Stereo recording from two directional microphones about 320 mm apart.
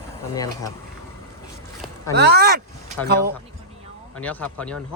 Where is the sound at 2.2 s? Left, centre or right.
Right.